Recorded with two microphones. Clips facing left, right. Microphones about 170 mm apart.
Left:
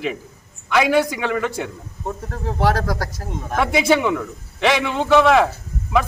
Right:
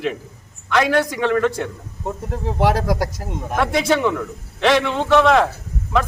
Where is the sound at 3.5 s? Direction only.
5° left (ahead or behind).